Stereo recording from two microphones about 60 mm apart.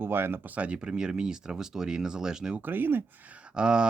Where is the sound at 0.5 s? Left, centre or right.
Centre.